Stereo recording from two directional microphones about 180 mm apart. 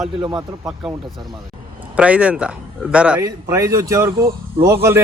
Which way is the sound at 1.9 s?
5° right (ahead or behind).